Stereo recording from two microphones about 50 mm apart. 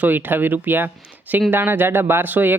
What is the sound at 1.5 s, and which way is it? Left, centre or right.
Speech, right.